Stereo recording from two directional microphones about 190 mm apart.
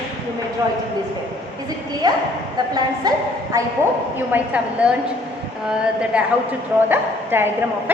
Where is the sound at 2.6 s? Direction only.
20° right (ahead or behind).